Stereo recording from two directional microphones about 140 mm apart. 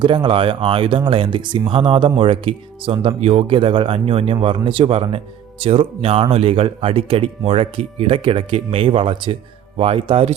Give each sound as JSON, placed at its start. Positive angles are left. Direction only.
{"t": 0.0, "sound": "speech", "side_deg": -35}